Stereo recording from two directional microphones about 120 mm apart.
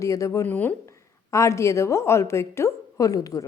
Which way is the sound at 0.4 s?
15° left (ahead or behind).